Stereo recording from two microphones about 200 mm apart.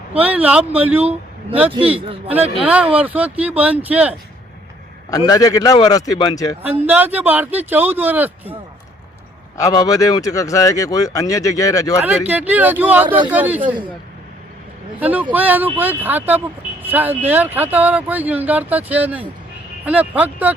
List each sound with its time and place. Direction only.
0.2 s speech: 5° right (ahead or behind)
2.0 s a man's voice: 25° right (ahead or behind)
2.6 s speech: 5° right (ahead or behind)
5.1 s a man's voice: 20° left (ahead or behind)
6.6 s speech: 10° right (ahead or behind)
9.6 s speech: 15° left (ahead or behind)
12.0 s speech: 10° right (ahead or behind)
13.6 s a man's voice: 25° right (ahead or behind)
15.0 s speech: 10° right (ahead or behind)